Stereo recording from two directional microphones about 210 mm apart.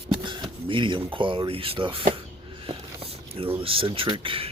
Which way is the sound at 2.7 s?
25° right (ahead or behind).